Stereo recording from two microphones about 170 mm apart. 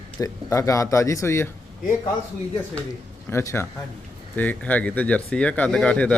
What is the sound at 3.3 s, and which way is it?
Speech, 15° left (ahead or behind).